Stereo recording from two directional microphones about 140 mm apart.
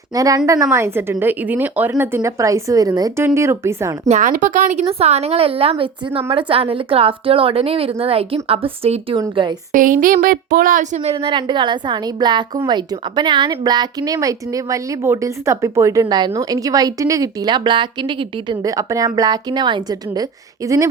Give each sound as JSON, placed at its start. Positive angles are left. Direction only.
{"t": 0.1, "sound": "a woman's voice", "side_deg": -25}
{"t": 4.1, "sound": "a woman's voice", "side_deg": -65}
{"t": 9.7, "sound": "speech", "side_deg": -75}